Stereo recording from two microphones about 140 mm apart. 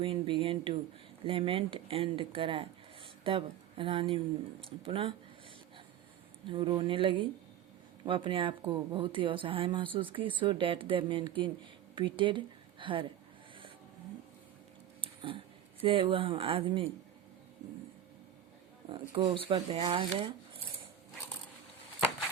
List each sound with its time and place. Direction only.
0.0 s speech: 40° right (ahead or behind)
6.5 s speech: 40° right (ahead or behind)
15.0 s a sound: 40° right (ahead or behind)
15.8 s speech: 40° right (ahead or behind)
18.9 s speech: 35° right (ahead or behind)